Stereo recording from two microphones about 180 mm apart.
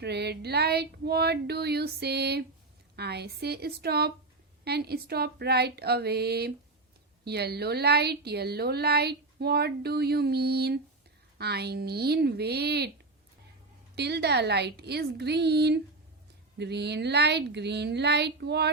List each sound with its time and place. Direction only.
0.0 s a woman's voice: 65° right (ahead or behind)
13.9 s speech: 65° right (ahead or behind)